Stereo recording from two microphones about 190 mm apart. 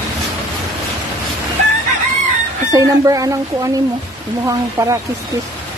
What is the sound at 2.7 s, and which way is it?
Speech, 15° right (ahead or behind).